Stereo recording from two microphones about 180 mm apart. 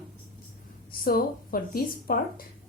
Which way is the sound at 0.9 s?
55° left (ahead or behind).